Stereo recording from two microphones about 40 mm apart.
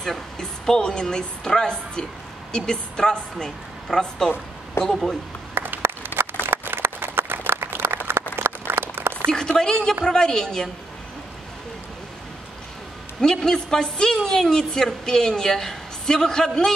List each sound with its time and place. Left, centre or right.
0.0 s a woman's voice: centre
4.8 s speech: left
5.5 s a sound: right
9.6 s a woman's voice: centre
13.2 s a woman's voice: centre